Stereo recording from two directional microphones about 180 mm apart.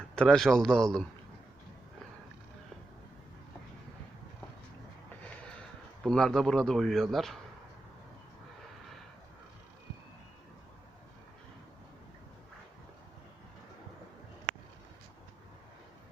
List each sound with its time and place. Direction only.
0.2 s a man's voice: 5° left (ahead or behind)
6.0 s a man's voice: centre (ahead or behind)